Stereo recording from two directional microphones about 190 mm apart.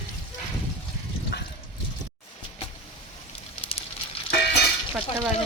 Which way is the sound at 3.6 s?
30° left (ahead or behind).